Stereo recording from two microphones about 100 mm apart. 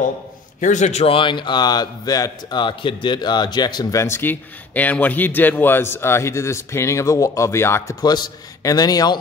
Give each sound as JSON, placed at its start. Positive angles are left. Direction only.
{"t": 0.9, "sound": "speech", "side_deg": 65}
{"t": 2.6, "sound": "speech", "side_deg": 55}
{"t": 3.9, "sound": "a man's voice", "side_deg": 25}
{"t": 8.0, "sound": "a man's voice", "side_deg": 40}